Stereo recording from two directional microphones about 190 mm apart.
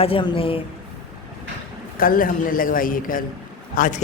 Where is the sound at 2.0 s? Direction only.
50° left (ahead or behind).